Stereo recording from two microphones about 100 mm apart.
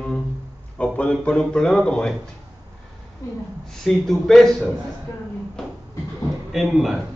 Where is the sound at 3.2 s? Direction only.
30° left (ahead or behind).